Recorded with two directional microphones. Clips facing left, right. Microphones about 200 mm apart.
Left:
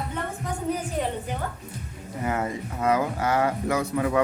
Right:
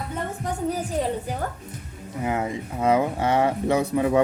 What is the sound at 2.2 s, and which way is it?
A man's voice, 15° right (ahead or behind).